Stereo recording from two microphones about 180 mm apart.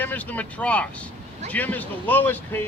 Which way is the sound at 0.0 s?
10° left (ahead or behind).